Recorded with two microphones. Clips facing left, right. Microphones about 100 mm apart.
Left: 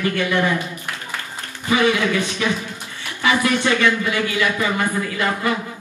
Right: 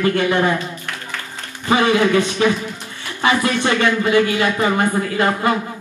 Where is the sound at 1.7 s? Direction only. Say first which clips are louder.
Right 3 dB; 30° right (ahead or behind).